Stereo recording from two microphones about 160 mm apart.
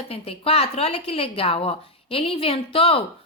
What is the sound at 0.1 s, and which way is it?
A woman's voice, 40° left (ahead or behind).